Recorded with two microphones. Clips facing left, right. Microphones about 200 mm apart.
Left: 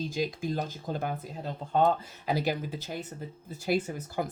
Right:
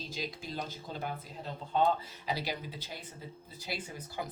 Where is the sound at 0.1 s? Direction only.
50° left (ahead or behind).